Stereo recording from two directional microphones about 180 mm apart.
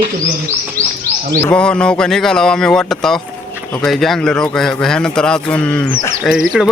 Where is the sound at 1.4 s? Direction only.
5° left (ahead or behind).